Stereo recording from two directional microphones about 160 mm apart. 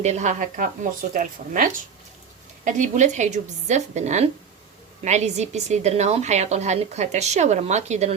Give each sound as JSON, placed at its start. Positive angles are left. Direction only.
{"t": 0.0, "sound": "a woman's voice", "side_deg": -45}
{"t": 2.7, "sound": "a woman's voice", "side_deg": -50}